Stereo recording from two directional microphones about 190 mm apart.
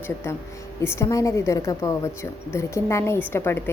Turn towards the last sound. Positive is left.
turn(degrees=10)  # may be behind; listen again after turning